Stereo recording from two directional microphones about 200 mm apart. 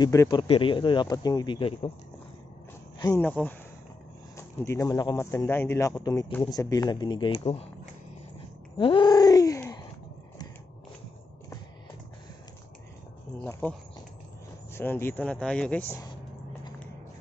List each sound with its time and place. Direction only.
0.0 s speech: 20° left (ahead or behind)
3.0 s speech: 10° left (ahead or behind); by 7.7 s 30° left (ahead or behind)
8.7 s a sound: 25° left (ahead or behind)
13.4 s speech: 10° left (ahead or behind)